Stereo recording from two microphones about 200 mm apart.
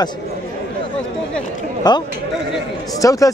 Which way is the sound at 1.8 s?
20° left (ahead or behind).